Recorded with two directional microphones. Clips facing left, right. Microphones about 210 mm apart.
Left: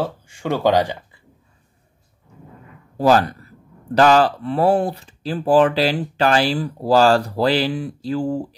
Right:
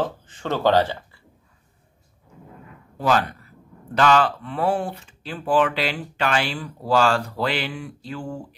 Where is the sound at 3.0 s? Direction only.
35° left (ahead or behind).